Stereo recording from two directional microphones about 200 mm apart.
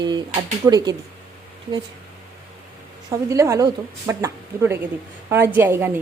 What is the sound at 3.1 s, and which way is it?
A woman's voice, 15° right (ahead or behind).